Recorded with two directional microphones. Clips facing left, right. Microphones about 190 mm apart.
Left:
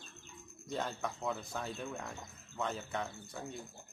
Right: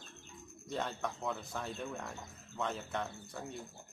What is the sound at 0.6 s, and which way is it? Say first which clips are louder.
Speech: even; centre (ahead or behind).